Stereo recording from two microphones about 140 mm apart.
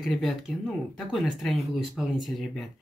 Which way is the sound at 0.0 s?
Centre (ahead or behind).